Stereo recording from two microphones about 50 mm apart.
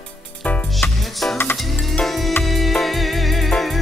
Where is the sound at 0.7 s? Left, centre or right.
Centre.